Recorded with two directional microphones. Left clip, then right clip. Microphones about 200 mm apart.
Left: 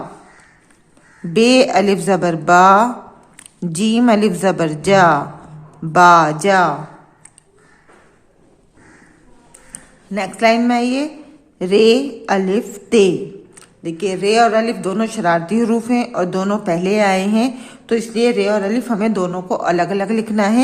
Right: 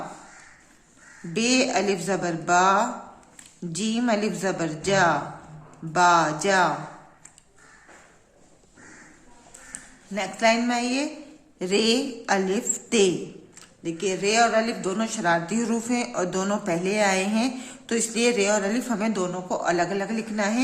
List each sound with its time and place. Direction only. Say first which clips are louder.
1.3 s a woman's voice: left 11 dB; 35° left (ahead or behind)
9.7 s speech: left 7 dB; 30° left (ahead or behind)